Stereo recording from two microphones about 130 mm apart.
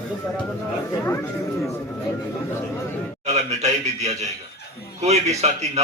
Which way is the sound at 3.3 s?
60° right (ahead or behind).